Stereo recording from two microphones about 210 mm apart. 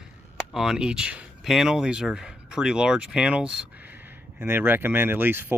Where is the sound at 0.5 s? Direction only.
5° right (ahead or behind).